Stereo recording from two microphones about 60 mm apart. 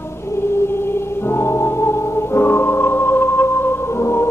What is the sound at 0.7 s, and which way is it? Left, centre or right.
Music, left.